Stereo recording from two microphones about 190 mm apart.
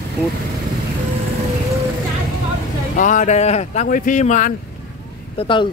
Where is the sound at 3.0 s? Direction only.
40° left (ahead or behind).